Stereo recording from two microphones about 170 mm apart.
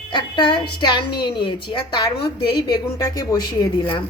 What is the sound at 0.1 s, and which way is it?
A woman's voice, 30° left (ahead or behind).